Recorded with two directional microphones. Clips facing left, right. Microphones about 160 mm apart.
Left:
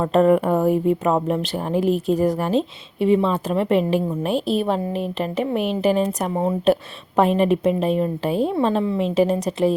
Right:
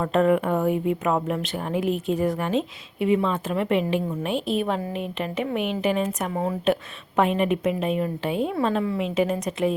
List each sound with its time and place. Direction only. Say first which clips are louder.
0.1 s speech: left 4 dB; 40° left (ahead or behind)